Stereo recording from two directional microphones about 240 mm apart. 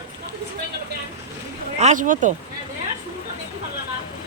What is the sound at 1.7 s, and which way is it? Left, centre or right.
Speech, right.